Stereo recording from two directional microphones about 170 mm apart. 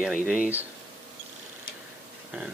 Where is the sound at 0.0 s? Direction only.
5° right (ahead or behind).